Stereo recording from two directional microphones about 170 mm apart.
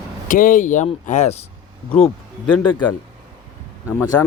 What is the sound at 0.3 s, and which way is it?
Speech, 55° left (ahead or behind).